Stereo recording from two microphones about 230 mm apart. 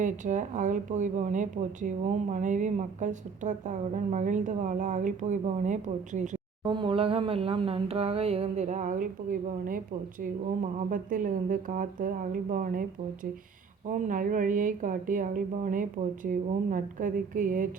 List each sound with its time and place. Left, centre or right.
0.0 s speech: right
6.7 s speech: right
13.8 s speech: right